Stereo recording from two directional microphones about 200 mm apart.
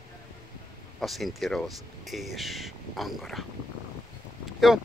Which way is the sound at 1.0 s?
Centre (ahead or behind).